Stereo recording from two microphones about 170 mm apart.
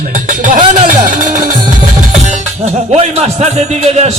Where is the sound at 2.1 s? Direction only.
40° right (ahead or behind).